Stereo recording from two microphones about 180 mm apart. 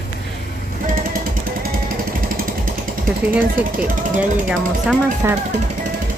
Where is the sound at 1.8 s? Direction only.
55° right (ahead or behind).